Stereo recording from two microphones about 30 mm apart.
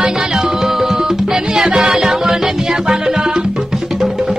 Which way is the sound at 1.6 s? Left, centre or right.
Right.